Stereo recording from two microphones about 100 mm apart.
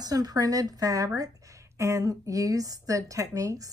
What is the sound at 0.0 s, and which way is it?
Speech, 40° right (ahead or behind).